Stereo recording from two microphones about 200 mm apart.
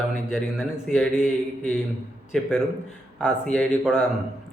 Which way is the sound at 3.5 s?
5° left (ahead or behind).